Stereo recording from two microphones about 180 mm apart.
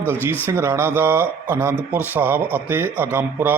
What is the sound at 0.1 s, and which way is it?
A man's voice, 10° right (ahead or behind).